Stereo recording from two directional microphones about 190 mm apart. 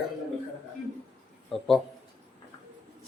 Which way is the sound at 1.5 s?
Centre (ahead or behind).